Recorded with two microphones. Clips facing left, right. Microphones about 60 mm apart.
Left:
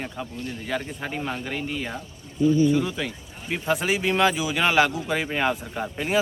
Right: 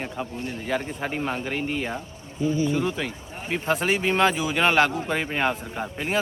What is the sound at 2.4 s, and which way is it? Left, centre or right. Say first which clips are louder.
Speech: left 4 dB; right.